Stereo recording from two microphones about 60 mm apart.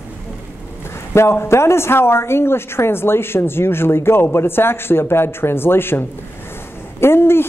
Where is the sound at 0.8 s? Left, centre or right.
Left.